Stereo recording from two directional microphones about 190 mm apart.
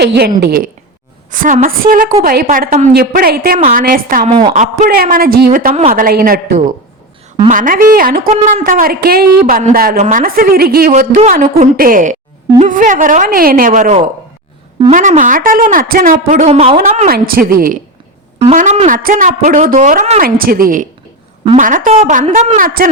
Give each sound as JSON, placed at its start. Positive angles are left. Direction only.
{"t": 0.0, "sound": "a woman's voice", "side_deg": -60}
{"t": 4.3, "sound": "a woman's voice", "side_deg": -25}
{"t": 4.5, "sound": "speech", "side_deg": -35}
{"t": 4.9, "sound": "speech", "side_deg": -50}
{"t": 7.4, "sound": "speech", "side_deg": -45}
{"t": 17.1, "sound": "speech", "side_deg": -50}
{"t": 18.3, "sound": "speech", "side_deg": -35}